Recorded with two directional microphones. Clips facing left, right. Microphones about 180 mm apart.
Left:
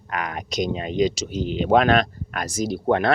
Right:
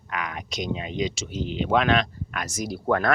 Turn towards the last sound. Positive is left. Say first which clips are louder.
# left 4 dB
turn(degrees=20)  # may be behind; listen again after turning